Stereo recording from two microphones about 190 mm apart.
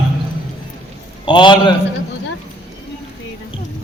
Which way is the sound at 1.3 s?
25° left (ahead or behind).